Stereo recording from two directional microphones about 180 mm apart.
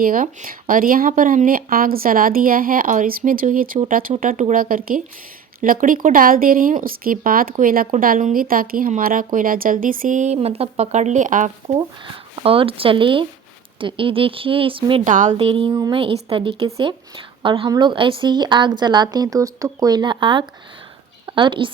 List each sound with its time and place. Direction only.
0.0 s speech: 50° right (ahead or behind)
12.4 s speech: 30° right (ahead or behind)
15.0 s speech: 45° right (ahead or behind); by 21.7 s 25° right (ahead or behind)